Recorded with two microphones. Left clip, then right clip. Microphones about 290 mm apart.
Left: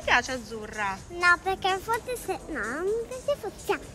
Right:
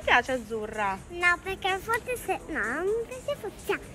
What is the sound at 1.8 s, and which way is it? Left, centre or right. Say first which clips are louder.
A woman's voice: even; centre.